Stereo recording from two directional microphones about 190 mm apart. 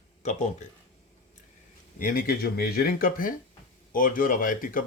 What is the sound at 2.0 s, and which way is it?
Speech, 45° left (ahead or behind).